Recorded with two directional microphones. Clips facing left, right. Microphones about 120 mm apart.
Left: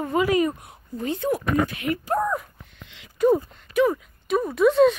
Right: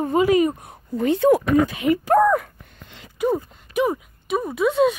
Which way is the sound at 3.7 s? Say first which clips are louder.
Left 1 dB; 15° right (ahead or behind).